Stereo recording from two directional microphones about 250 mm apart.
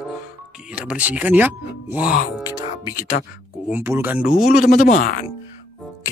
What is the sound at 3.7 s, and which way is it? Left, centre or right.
Speech, centre.